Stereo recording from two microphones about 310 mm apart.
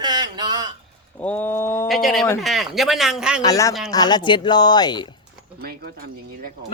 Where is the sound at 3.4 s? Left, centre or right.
Centre.